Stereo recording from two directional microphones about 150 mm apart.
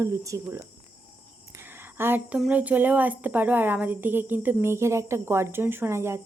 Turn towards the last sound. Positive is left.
turn(degrees=-15)  # may be behind; listen again after turning